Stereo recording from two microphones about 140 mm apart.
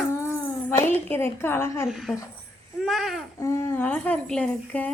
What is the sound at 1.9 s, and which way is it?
Child singing, centre (ahead or behind).